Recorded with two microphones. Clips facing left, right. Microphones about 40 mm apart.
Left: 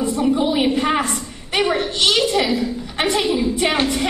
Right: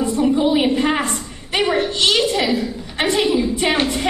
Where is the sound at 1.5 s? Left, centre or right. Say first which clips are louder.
Even; centre.